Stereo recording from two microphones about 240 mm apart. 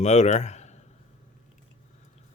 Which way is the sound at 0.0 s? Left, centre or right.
Left.